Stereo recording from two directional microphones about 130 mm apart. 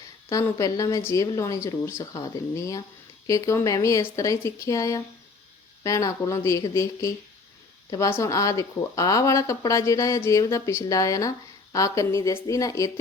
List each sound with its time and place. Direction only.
0.6 s a woman's voice: 25° left (ahead or behind)